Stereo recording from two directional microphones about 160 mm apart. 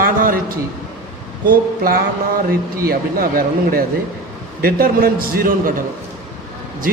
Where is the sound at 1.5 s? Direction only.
65° right (ahead or behind).